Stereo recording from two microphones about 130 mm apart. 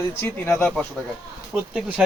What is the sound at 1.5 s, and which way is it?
Speech, 10° right (ahead or behind).